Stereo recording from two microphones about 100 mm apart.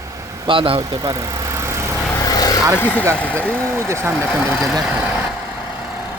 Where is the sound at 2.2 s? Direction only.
40° left (ahead or behind).